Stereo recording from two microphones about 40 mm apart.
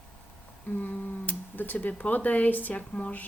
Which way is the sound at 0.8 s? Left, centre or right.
Left.